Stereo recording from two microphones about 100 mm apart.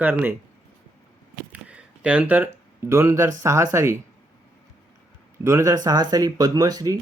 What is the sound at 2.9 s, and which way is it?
Speech, 25° right (ahead or behind).